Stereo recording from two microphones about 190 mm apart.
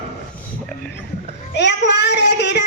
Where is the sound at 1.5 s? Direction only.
65° left (ahead or behind).